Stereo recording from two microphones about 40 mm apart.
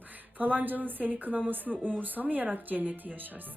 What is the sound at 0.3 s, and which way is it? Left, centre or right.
A woman's voice, right.